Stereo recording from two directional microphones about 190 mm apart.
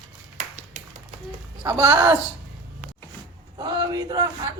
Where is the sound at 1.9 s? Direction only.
20° right (ahead or behind).